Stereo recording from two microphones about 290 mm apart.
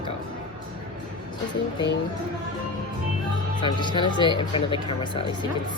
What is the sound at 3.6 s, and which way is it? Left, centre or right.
Speech, centre.